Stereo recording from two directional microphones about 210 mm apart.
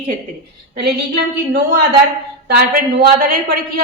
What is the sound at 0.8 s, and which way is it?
Speech, 55° right (ahead or behind).